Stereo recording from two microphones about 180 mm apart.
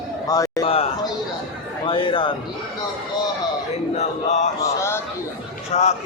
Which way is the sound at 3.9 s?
40° left (ahead or behind).